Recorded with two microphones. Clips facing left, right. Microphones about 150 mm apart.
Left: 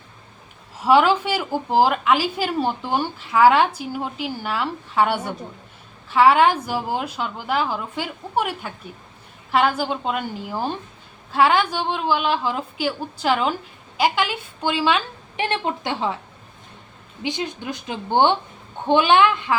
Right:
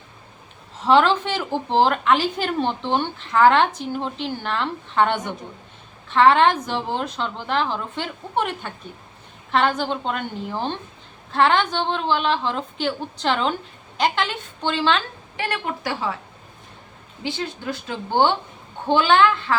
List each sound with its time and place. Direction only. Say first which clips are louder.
0.8 s a woman's voice: left 1 dB; 10° left (ahead or behind)
15.4 s a woman's voice: left 2 dB; 25° left (ahead or behind)
17.2 s a woman's voice: left 1 dB; 15° left (ahead or behind)